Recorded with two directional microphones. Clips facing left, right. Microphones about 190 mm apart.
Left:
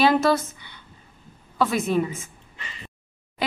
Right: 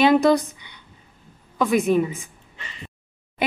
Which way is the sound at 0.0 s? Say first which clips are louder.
Right 3 dB; 15° right (ahead or behind).